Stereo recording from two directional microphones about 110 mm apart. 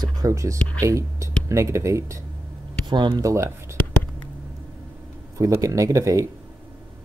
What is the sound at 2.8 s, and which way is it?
Speech, 45° right (ahead or behind).